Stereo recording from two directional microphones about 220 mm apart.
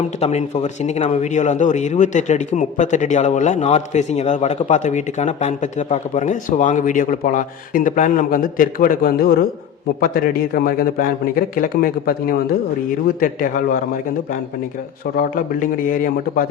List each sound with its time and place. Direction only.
0.2 s speech: 30° left (ahead or behind)
15.9 s speech: 40° left (ahead or behind)